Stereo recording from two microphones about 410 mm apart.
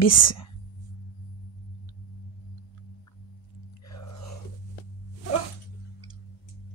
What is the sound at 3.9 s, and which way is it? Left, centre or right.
Biting, left.